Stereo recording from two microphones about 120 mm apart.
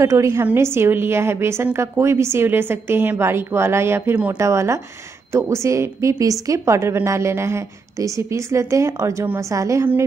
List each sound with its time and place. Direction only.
0.0 s a woman's voice: 25° right (ahead or behind)